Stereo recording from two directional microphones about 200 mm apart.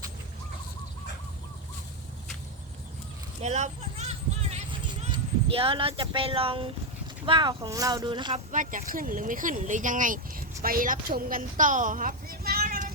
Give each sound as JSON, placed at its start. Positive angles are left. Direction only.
{"t": 3.4, "sound": "a sound", "side_deg": -35}
{"t": 7.3, "sound": "speech", "side_deg": -25}
{"t": 8.5, "sound": "a woman's voice", "side_deg": -40}